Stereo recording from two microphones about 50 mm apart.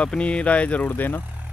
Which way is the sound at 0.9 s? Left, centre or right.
Left.